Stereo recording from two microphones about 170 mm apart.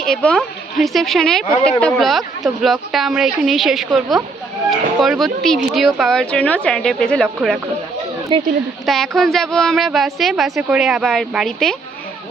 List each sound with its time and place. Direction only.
0.0 s a woman's voice: 5° left (ahead or behind)
8.3 s speech: 30° right (ahead or behind)
8.9 s a woman's voice: centre (ahead or behind)